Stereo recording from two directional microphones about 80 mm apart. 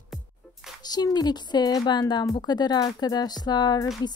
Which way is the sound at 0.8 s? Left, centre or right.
Left.